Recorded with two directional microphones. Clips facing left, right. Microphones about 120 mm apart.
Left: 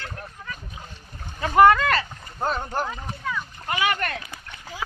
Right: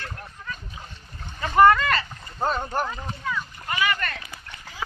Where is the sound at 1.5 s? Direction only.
5° left (ahead or behind).